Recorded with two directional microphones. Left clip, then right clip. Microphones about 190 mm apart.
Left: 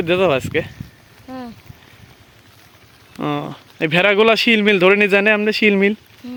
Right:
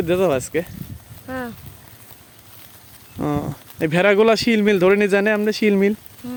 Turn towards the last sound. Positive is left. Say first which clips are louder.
# right 1 dB
turn(degrees=-35)  # may be behind; listen again after turning